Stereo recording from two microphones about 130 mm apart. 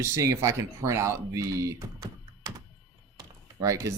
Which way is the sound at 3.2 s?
25° right (ahead or behind).